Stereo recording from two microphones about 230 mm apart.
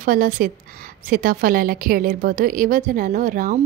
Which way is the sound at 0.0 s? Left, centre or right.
Right.